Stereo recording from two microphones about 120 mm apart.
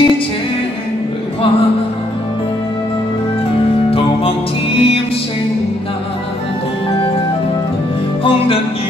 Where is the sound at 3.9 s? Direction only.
50° left (ahead or behind).